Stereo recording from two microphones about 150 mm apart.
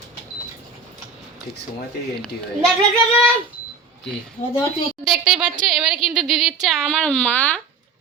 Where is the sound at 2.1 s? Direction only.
5° left (ahead or behind).